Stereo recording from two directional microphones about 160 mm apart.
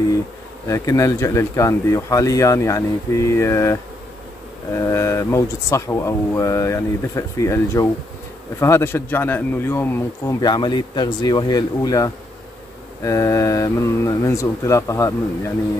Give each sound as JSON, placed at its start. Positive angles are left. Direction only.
{"t": 0.7, "sound": "speech", "side_deg": 20}
{"t": 10.4, "sound": "speech", "side_deg": 25}